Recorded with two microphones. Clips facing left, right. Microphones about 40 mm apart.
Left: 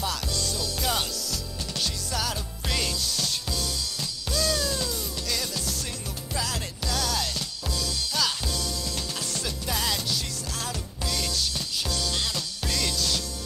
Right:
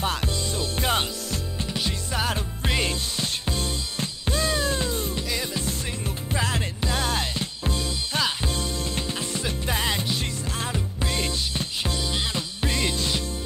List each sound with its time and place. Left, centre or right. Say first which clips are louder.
0.0 s music: right 3 dB; right